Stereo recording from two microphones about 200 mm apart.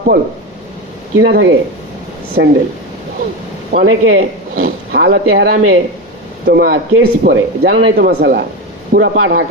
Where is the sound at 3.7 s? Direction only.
50° right (ahead or behind); by 5.8 s 75° right (ahead or behind).